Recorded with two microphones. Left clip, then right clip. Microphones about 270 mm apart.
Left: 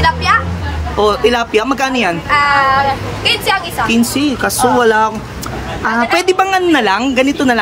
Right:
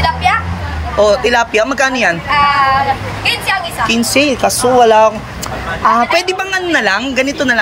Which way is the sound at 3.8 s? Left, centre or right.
Centre.